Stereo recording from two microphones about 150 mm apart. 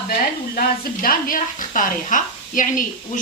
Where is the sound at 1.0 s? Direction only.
65° left (ahead or behind).